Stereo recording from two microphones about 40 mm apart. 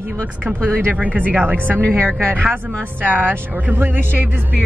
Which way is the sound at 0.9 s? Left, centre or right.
Right.